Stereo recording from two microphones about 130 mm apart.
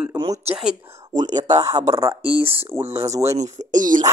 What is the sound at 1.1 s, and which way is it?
Speech, 30° right (ahead or behind).